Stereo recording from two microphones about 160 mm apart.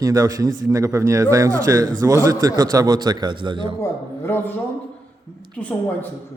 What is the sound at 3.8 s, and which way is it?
Speech, 15° left (ahead or behind).